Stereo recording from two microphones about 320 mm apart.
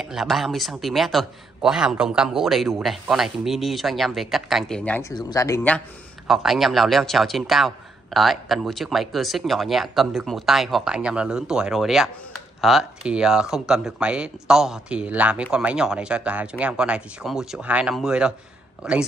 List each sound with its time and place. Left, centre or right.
0.0 s speech: centre